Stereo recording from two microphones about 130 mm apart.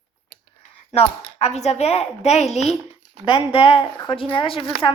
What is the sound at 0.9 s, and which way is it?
Speech, 55° left (ahead or behind).